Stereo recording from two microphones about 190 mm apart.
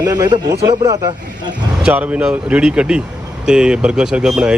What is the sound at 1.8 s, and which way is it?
A man's voice, 5° right (ahead or behind).